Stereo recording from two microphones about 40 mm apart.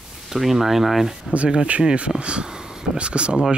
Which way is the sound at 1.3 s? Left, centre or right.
Right.